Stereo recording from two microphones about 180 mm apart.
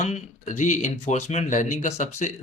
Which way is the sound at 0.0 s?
40° left (ahead or behind).